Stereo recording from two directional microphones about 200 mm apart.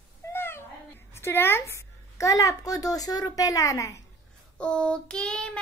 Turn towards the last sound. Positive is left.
turn(degrees=5)  # may be behind; listen again after turning